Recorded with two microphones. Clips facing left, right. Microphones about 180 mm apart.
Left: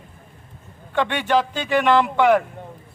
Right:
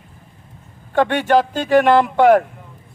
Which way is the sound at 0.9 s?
45° right (ahead or behind).